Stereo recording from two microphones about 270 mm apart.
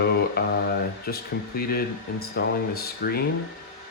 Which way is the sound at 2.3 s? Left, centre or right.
Left.